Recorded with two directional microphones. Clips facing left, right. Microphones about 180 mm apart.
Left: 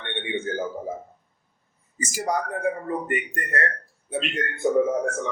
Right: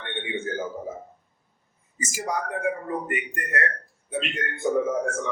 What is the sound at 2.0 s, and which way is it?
Speech, 35° left (ahead or behind).